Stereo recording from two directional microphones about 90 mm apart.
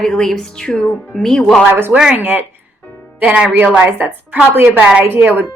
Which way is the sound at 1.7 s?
25° right (ahead or behind).